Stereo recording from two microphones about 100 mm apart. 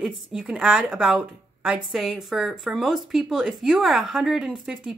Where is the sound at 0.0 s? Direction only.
5° right (ahead or behind).